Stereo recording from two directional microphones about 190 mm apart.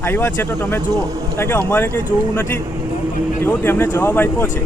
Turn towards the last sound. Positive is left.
turn(degrees=10)  # may be behind; listen again after turning